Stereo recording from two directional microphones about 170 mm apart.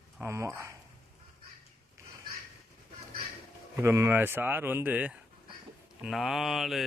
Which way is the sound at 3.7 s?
15° right (ahead or behind).